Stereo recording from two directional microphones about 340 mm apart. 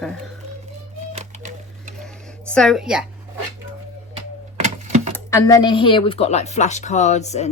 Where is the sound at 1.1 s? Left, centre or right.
Right.